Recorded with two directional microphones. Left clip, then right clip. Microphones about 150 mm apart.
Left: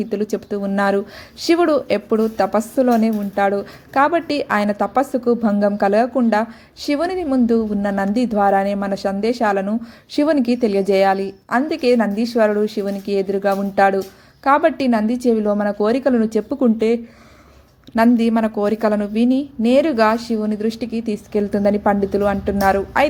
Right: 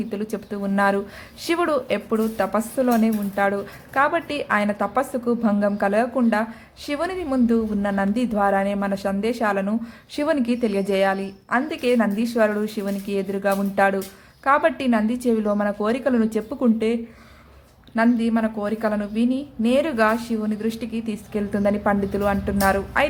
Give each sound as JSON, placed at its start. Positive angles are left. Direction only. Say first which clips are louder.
{"t": 0.0, "sound": "speech", "louder": "left 7 dB", "side_deg": 30}
{"t": 17.9, "sound": "speech", "louder": "left 5 dB", "side_deg": 45}